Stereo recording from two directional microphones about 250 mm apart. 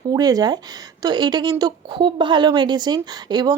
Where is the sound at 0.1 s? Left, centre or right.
Centre.